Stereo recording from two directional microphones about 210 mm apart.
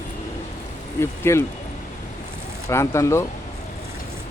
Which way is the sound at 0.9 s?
10° left (ahead or behind).